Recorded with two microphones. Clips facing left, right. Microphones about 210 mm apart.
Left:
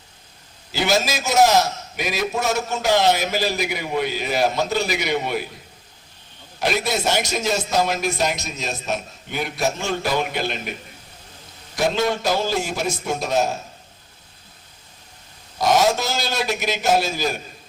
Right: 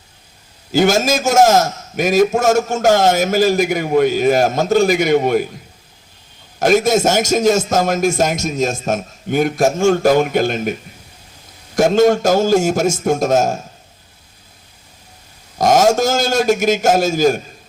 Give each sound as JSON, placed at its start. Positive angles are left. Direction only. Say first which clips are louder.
{"t": 0.7, "sound": "a man's voice", "louder": "right 7 dB", "side_deg": -45}
{"t": 6.6, "sound": "a man's voice", "louder": "right 10 dB", "side_deg": -45}
{"t": 11.8, "sound": "a man's voice", "louder": "right 9 dB", "side_deg": -45}
{"t": 15.5, "sound": "a man's voice", "louder": "right 6 dB", "side_deg": -45}